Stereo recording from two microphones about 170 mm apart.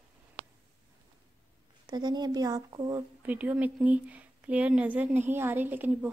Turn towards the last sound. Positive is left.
turn(degrees=-10)  # may be behind; listen again after turning